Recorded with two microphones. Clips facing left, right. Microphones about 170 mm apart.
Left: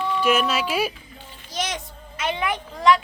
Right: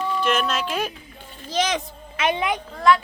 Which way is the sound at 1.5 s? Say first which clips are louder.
Right 6 dB; 90° right.